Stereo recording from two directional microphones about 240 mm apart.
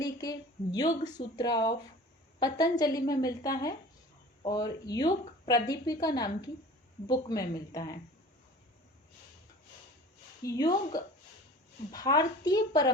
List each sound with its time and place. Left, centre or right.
0.0 s a woman's voice: centre
10.4 s a woman's voice: centre